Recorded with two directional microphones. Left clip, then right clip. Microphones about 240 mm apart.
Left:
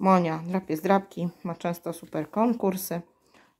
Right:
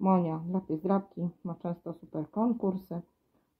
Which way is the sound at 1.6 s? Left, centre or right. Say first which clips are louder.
Left 8 dB; left.